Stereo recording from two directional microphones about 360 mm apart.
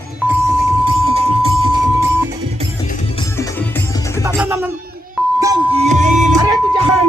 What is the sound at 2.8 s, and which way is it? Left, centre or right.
Music, centre.